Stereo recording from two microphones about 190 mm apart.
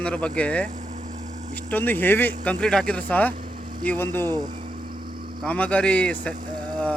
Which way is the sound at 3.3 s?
45° right (ahead or behind).